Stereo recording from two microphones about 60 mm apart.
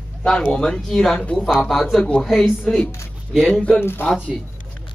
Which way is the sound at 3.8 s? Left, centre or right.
Left.